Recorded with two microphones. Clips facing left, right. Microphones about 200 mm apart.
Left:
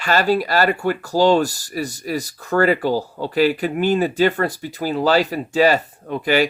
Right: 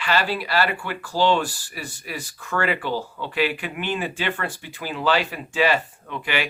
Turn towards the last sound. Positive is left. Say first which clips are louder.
# left 9 dB
turn(degrees=40)  # may be behind; listen again after turning